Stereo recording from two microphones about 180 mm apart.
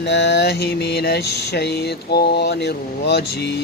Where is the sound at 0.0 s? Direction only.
75° left (ahead or behind).